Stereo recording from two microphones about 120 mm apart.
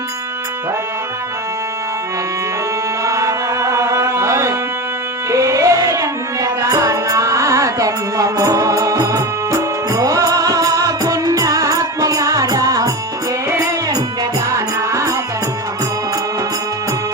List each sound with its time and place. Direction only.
3.0 s music: 25° right (ahead or behind)
14.5 s music: 25° right (ahead or behind)